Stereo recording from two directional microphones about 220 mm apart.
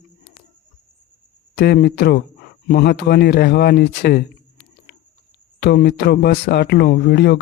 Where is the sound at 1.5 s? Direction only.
45° left (ahead or behind).